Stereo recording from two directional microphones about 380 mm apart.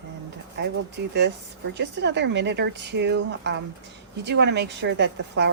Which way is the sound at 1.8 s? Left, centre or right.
Right.